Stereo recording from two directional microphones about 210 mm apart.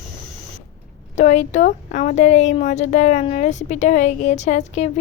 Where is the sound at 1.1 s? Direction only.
35° left (ahead or behind).